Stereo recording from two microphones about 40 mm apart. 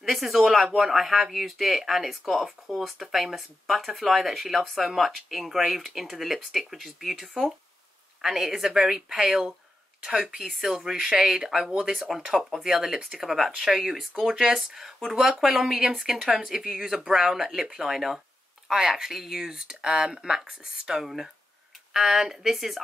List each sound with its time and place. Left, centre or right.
0.0 s speech: centre
21.0 s speech: centre